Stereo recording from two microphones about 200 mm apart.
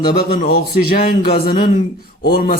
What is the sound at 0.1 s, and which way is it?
A man's voice, 50° left (ahead or behind).